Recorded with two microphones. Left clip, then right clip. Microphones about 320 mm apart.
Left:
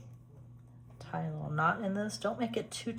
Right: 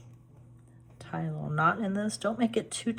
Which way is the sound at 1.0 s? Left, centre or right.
Right.